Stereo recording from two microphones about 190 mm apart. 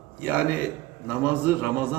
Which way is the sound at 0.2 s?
10° right (ahead or behind).